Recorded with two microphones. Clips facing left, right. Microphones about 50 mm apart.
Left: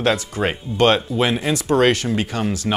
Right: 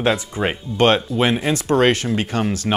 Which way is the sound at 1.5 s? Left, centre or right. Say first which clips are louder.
Left 2 dB; right.